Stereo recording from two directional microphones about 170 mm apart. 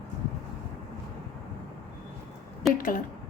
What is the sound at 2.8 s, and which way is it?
Speech, 55° left (ahead or behind).